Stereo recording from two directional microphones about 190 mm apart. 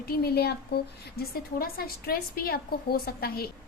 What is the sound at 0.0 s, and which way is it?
A woman's voice, 55° left (ahead or behind).